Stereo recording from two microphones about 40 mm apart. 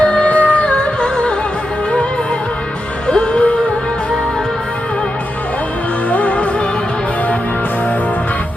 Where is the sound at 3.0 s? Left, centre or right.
Left.